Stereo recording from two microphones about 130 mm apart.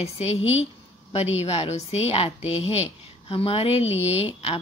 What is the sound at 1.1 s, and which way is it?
A woman's voice, 55° left (ahead or behind).